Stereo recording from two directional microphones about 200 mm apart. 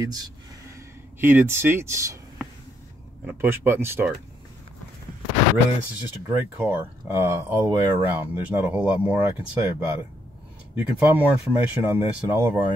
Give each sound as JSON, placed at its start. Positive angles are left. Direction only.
{"t": 0.0, "sound": "speech", "side_deg": -20}
{"t": 6.2, "sound": "speech", "side_deg": -15}